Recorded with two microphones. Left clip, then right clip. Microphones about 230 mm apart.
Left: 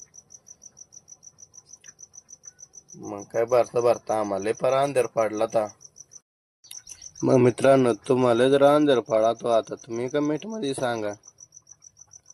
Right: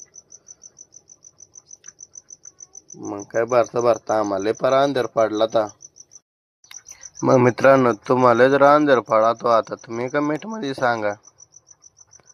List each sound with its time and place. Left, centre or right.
3.0 s speech: right
7.2 s speech: centre